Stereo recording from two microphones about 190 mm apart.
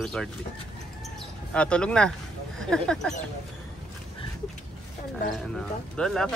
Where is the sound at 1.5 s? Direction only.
5° left (ahead or behind).